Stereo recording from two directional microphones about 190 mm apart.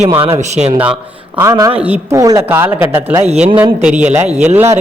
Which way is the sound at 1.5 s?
25° right (ahead or behind).